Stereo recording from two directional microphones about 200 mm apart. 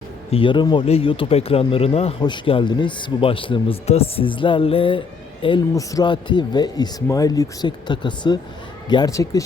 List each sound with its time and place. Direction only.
0.3 s speech: 25° left (ahead or behind)